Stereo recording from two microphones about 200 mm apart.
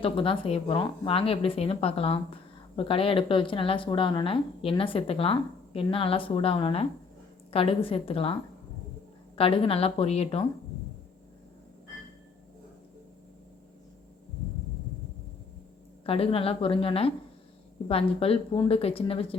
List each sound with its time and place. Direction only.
0.0 s speech: 25° left (ahead or behind)
16.0 s speech: 30° left (ahead or behind)